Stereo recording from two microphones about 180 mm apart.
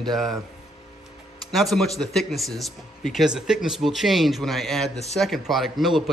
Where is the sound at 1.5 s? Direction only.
Centre (ahead or behind).